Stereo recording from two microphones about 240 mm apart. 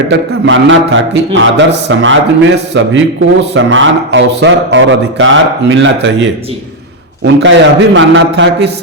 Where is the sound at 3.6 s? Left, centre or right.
Right.